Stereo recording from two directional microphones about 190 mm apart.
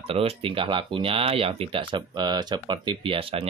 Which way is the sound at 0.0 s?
30° right (ahead or behind).